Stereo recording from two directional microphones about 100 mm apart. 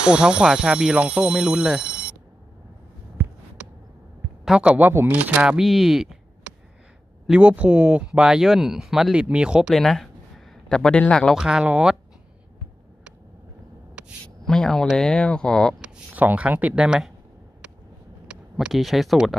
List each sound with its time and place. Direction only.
0.0 s speech: 10° right (ahead or behind)
4.5 s speech: 10° right (ahead or behind)
5.7 s a sound: 5° right (ahead or behind)
7.2 s speech: 10° right (ahead or behind); by 11.3 s 10° left (ahead or behind)
11.3 s speech: 5° right (ahead or behind)
14.0 s a sound: 10° right (ahead or behind)
14.4 s speech: 5° left (ahead or behind)
15.8 s speech: 15° right (ahead or behind)
18.2 s speech: 10° right (ahead or behind)